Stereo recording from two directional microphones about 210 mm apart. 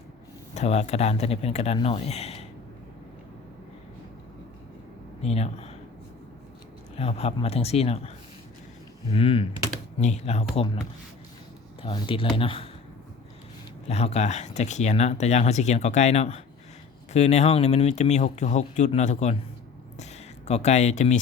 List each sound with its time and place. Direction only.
0.5 s speech: 30° left (ahead or behind)
5.2 s speech: 30° left (ahead or behind)
6.9 s speech: 30° left (ahead or behind)
9.1 s speech: 25° left (ahead or behind)
11.8 s speech: 25° left (ahead or behind)
13.8 s speech: 30° left (ahead or behind)
20.5 s speech: 35° left (ahead or behind)